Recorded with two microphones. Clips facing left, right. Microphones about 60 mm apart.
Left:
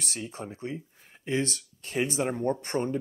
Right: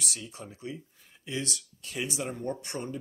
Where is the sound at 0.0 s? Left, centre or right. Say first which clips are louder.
Left 4 dB; left.